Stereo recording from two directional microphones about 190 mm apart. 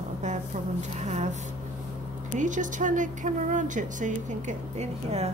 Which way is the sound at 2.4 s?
40° right (ahead or behind).